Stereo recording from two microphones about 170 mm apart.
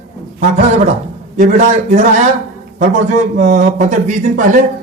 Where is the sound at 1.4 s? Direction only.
50° right (ahead or behind).